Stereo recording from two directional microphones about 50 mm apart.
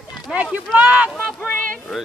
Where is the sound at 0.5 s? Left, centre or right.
Right.